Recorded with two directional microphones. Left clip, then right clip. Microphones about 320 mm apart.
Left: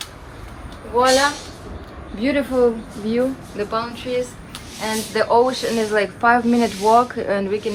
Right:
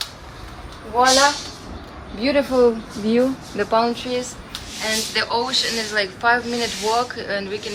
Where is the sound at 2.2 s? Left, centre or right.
Centre.